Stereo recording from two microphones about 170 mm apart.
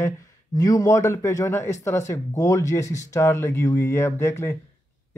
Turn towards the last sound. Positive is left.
turn(degrees=15)  # may be behind; listen again after turning